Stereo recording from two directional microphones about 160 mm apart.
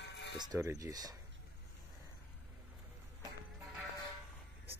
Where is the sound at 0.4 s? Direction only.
20° right (ahead or behind).